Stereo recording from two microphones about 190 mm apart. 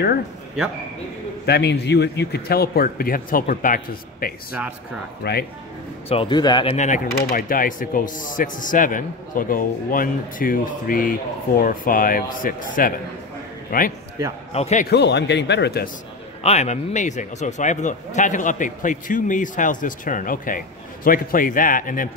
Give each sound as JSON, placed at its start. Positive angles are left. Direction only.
{"t": 1.4, "sound": "speech", "side_deg": 60}
{"t": 5.2, "sound": "speech", "side_deg": 60}
{"t": 6.0, "sound": "speech", "side_deg": 25}
{"t": 7.2, "sound": "a man's voice", "side_deg": 50}
{"t": 14.5, "sound": "a man's voice", "side_deg": 35}
{"t": 14.9, "sound": "speech", "side_deg": 65}
{"t": 16.4, "sound": "speech", "side_deg": 35}